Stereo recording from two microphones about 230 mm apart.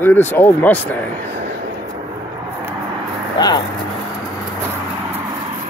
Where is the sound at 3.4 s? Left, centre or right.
Centre.